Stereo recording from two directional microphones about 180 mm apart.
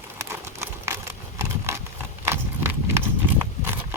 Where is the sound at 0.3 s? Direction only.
15° right (ahead or behind).